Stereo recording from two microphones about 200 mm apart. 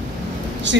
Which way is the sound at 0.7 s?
65° right (ahead or behind).